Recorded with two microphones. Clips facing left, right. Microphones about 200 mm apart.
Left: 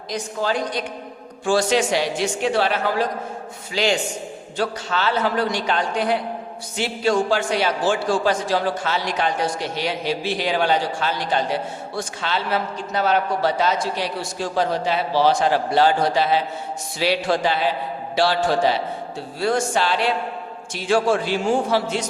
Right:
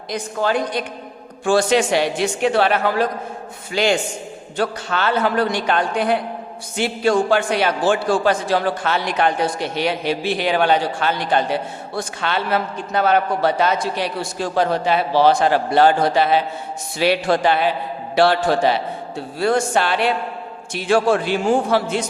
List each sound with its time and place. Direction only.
0.1 s a man's voice: 55° right (ahead or behind)